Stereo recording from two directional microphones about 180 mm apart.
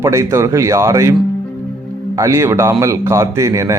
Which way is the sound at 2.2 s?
15° right (ahead or behind).